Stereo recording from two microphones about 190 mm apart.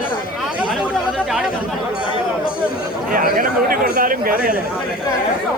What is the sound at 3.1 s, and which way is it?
Speech, 45° right (ahead or behind).